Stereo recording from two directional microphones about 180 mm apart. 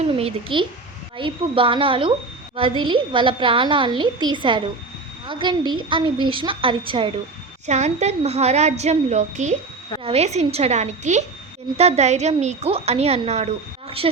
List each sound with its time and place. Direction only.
0.0 s a woman's voice: 35° right (ahead or behind)